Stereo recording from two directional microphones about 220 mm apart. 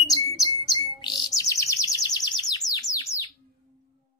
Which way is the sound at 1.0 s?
15° left (ahead or behind).